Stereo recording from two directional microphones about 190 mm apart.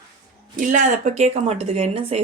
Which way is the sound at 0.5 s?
45° right (ahead or behind).